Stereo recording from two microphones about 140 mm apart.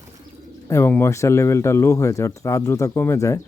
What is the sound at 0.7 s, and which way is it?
Speech, 15° left (ahead or behind).